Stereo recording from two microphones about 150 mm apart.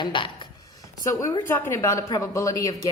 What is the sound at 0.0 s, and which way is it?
Speech, 35° left (ahead or behind).